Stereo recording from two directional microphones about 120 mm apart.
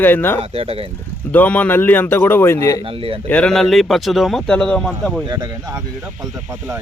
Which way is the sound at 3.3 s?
10° left (ahead or behind).